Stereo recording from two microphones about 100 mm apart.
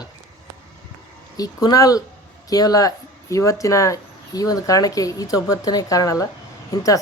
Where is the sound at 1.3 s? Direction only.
40° left (ahead or behind).